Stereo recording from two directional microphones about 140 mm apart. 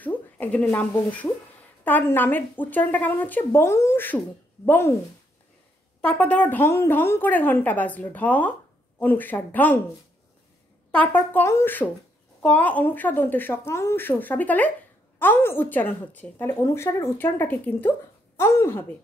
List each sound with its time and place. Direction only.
0.0 s a woman's voice: 10° left (ahead or behind)
5.9 s a woman's voice: 10° left (ahead or behind)
10.9 s a woman's voice: 10° left (ahead or behind)